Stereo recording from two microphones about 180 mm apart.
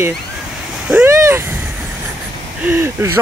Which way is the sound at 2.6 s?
10° right (ahead or behind).